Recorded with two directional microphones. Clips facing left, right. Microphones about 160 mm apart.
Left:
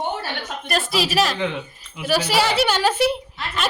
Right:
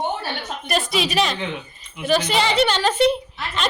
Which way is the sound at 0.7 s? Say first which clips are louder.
Even; centre (ahead or behind).